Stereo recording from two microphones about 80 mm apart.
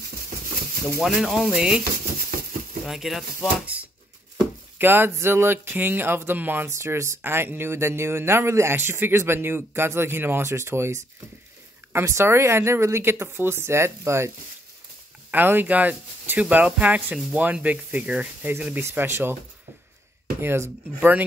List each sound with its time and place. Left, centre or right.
1.0 s speech: centre
2.9 s speech: centre
4.7 s speech: right
6.7 s speech: right
15.3 s speech: right
18.8 s speech: right
20.3 s speech: right